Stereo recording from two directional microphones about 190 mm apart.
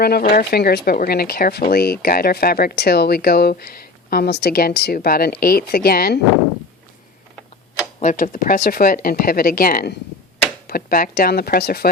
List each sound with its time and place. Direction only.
0.0 s speech: 50° left (ahead or behind)
8.1 s speech: 45° left (ahead or behind)